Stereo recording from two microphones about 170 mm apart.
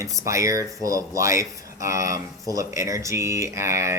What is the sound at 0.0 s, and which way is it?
Speech, 20° right (ahead or behind).